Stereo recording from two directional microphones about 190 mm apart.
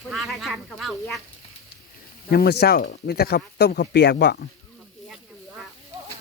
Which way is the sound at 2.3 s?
55° left (ahead or behind).